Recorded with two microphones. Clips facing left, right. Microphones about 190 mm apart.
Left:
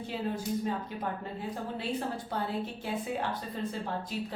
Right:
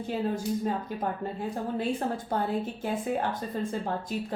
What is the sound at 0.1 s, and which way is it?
A woman's voice, 45° right (ahead or behind).